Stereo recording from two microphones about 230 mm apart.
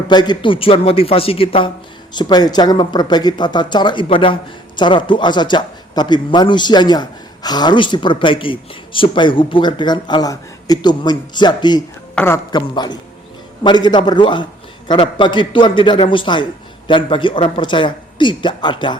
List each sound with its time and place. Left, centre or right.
0.1 s a woman's voice: centre